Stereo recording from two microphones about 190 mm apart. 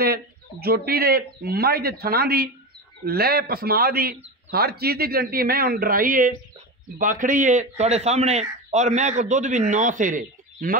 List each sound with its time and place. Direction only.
0.0 s a man's voice: 55° right (ahead or behind)